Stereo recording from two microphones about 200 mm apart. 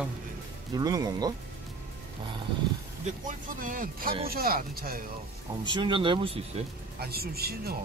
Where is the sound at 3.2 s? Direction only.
40° right (ahead or behind).